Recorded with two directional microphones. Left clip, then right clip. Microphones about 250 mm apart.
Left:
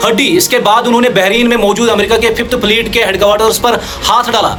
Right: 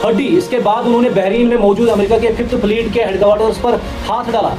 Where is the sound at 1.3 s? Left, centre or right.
Left.